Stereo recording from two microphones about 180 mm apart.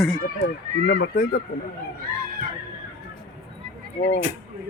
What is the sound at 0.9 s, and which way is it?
Speech, 65° left (ahead or behind).